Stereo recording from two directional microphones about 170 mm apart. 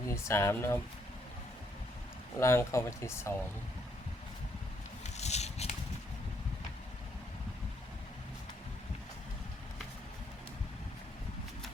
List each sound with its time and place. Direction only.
0.1 s speech: 15° left (ahead or behind)
2.4 s speech: 15° left (ahead or behind)
5.0 s a sound: 40° left (ahead or behind)